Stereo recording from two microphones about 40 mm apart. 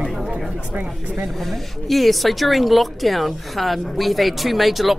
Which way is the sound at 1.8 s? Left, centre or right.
Centre.